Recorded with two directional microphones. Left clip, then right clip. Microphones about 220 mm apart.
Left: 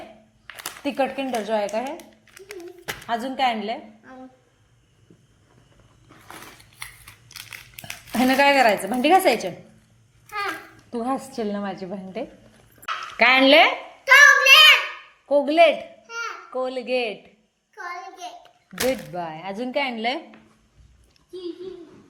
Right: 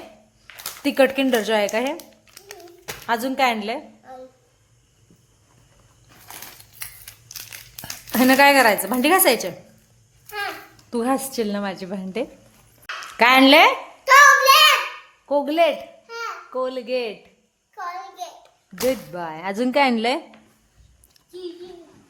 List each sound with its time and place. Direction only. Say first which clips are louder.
0.4 s a sound: left 1 dB; 20° left (ahead or behind)
0.9 s a woman's voice: right 7 dB; 25° right (ahead or behind)
3.1 s a woman's voice: right 3 dB; 20° right (ahead or behind)
7.8 s speech: right 3 dB; 15° right (ahead or behind)
10.9 s a woman's voice: right 4 dB; 20° right (ahead or behind)
13.1 s a sound: right 2 dB; 15° right (ahead or behind)
15.3 s a woman's voice: left 2 dB; 10° right (ahead or behind)
19.1 s a woman's voice: right 3 dB; 15° right (ahead or behind)